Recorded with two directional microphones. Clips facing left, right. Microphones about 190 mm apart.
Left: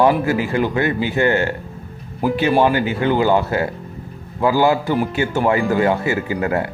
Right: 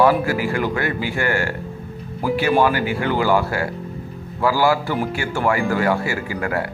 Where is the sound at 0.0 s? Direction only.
20° left (ahead or behind).